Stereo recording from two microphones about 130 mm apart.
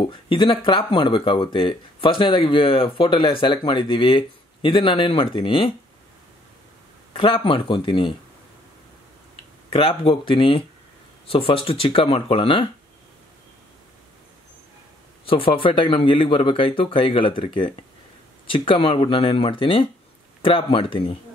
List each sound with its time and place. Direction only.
0.0 s speech: 40° left (ahead or behind)
7.2 s speech: 45° left (ahead or behind)
9.7 s speech: 45° left (ahead or behind)
15.2 s speech: 45° left (ahead or behind)